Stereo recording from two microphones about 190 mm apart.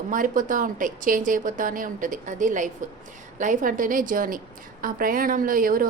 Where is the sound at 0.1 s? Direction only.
45° right (ahead or behind).